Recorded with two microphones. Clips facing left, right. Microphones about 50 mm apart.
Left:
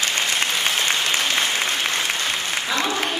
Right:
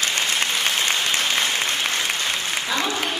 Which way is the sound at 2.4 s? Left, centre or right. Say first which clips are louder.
Left 1 dB; centre.